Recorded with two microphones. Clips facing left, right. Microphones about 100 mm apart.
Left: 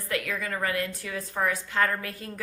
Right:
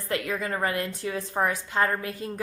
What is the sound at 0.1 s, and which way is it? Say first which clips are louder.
A woman's voice: right 2 dB; 30° right (ahead or behind).